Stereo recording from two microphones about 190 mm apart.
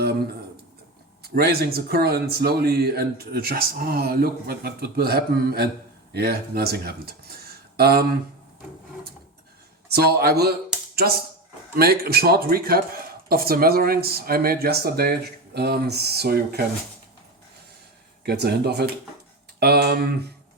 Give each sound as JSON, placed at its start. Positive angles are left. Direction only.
{"t": 1.4, "sound": "speech", "side_deg": -55}
{"t": 9.9, "sound": "speech", "side_deg": -55}
{"t": 11.8, "sound": "speech", "side_deg": -55}
{"t": 18.2, "sound": "speech", "side_deg": -55}